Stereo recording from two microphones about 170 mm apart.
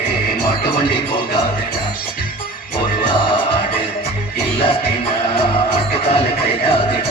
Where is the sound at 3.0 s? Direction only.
30° left (ahead or behind).